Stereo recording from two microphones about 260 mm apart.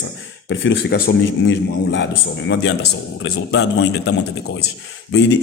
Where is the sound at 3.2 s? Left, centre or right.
Left.